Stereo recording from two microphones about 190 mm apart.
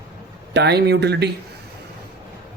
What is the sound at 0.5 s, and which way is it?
Speech, 60° right (ahead or behind).